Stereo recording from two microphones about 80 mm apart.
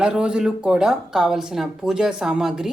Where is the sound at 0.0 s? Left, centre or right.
Centre.